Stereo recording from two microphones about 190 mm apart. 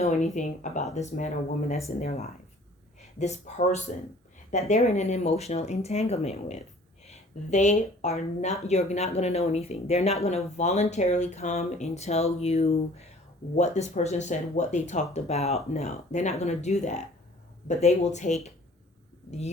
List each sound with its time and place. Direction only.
0.0 s speech: 40° left (ahead or behind)